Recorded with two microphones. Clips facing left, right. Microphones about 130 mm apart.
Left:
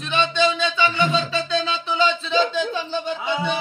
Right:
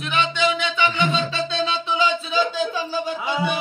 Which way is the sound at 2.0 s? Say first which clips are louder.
Left 2 dB; 10° right (ahead or behind).